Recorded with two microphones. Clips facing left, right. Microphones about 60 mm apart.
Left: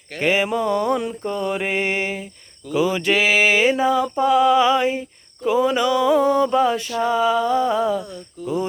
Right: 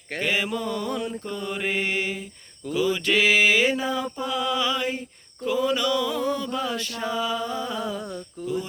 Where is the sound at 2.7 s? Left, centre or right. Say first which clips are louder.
Left 4 dB; left.